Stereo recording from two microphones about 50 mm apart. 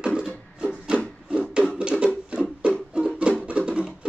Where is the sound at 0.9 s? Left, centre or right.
Centre.